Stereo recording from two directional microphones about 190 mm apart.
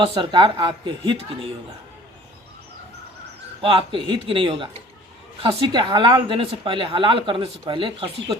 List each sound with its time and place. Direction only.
0.0 s a woman's voice: 25° right (ahead or behind)
3.6 s a woman's voice: 30° right (ahead or behind)